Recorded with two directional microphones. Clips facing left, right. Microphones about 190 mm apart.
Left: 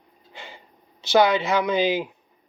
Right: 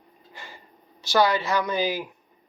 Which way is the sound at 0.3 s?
25° left (ahead or behind).